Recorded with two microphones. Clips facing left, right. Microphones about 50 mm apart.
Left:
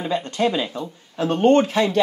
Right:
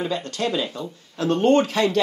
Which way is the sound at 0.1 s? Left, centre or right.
Left.